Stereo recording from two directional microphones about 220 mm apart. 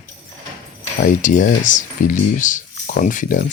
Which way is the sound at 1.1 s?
35° left (ahead or behind).